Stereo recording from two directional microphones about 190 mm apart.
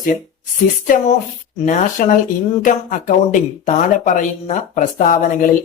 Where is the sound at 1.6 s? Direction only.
45° left (ahead or behind).